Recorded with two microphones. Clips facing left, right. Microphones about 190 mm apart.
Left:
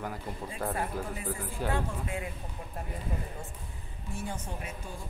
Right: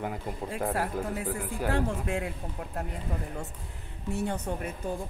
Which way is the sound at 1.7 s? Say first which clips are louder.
Right 5 dB; 75° right (ahead or behind).